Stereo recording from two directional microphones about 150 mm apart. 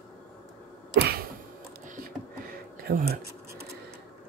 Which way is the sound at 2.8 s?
90° right.